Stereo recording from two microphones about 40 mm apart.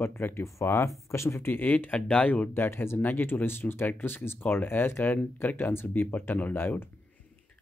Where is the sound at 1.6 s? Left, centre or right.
Left.